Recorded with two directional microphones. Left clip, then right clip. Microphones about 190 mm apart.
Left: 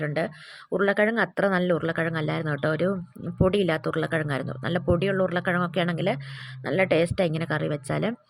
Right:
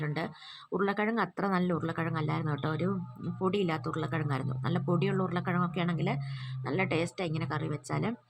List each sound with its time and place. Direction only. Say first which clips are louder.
0.0 s speech: left 8 dB; 20° left (ahead or behind)